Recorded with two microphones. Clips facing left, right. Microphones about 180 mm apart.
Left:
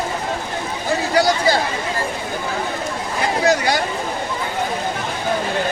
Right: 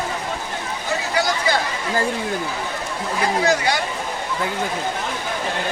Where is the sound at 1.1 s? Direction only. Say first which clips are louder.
Left 5 dB; 35° left (ahead or behind).